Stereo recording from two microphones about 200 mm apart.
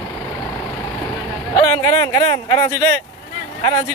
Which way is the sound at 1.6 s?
15° left (ahead or behind).